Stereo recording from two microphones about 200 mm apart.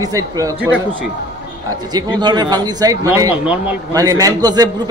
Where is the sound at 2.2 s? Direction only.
20° right (ahead or behind).